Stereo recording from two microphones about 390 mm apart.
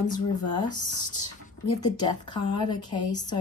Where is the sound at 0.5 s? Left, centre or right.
Centre.